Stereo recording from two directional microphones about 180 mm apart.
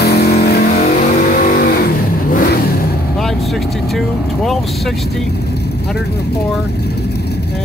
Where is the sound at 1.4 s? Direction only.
55° left (ahead or behind).